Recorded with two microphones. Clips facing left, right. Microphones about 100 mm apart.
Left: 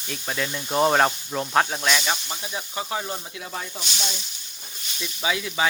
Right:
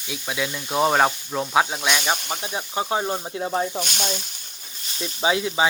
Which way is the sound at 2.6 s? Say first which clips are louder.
Right 5 dB; 30° right (ahead or behind).